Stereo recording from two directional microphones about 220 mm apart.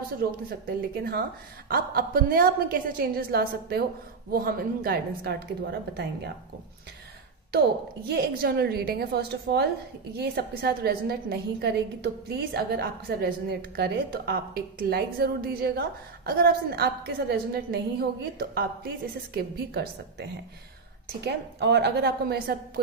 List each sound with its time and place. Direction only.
0.2 s a woman's voice: 45° right (ahead or behind)
8.1 s a woman's voice: 45° right (ahead or behind)